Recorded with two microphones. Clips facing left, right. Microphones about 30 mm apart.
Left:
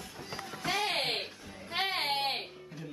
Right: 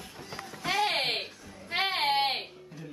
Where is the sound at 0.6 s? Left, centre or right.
Centre.